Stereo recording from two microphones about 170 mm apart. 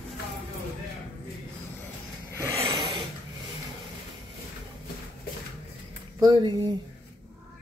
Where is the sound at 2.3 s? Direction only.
15° right (ahead or behind).